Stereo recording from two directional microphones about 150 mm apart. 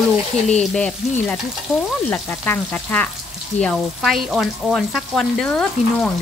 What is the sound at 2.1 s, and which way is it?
Speech, 10° left (ahead or behind).